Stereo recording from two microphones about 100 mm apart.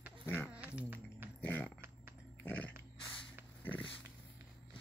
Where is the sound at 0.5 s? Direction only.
15° right (ahead or behind).